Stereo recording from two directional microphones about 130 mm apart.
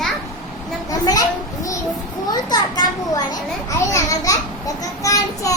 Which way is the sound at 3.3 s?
25° left (ahead or behind).